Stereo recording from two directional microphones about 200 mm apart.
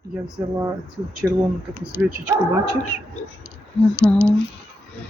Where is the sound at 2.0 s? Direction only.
5° right (ahead or behind).